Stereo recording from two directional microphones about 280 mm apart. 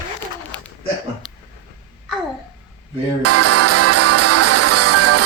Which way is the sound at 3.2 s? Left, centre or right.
Right.